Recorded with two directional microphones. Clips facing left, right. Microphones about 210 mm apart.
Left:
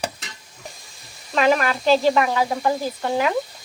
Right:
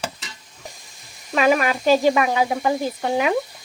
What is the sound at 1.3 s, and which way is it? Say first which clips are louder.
Speech: right 1 dB; 10° right (ahead or behind).